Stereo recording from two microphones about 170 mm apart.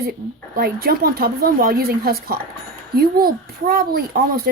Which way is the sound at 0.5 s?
60° right (ahead or behind).